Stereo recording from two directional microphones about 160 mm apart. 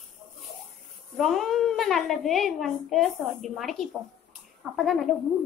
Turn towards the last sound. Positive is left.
turn(degrees=0)  # may be behind; listen again after turning